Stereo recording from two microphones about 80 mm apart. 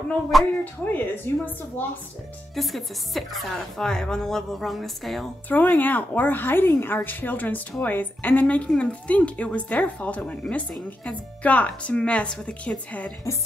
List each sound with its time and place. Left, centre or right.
0.3 s speech: centre
0.8 s a woman's voice: left
2.5 s speech: centre
5.5 s a woman's voice: left